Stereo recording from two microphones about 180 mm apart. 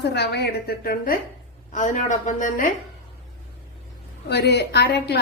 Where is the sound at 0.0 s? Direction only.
70° left (ahead or behind).